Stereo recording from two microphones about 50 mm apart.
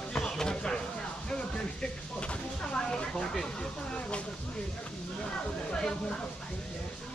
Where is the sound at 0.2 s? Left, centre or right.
Centre.